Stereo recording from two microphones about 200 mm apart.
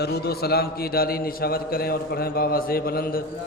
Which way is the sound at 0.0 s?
50° left (ahead or behind).